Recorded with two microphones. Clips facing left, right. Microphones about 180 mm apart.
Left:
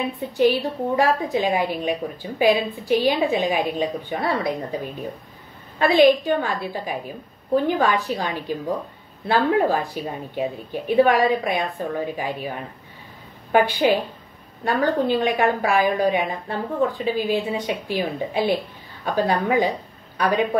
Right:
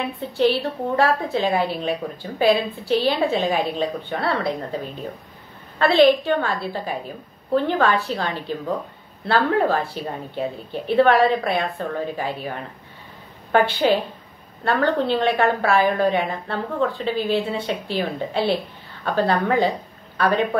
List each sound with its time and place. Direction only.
0.4 s a woman's voice: 15° left (ahead or behind)